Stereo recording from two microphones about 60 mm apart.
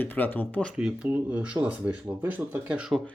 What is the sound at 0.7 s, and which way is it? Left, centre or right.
Speech, centre.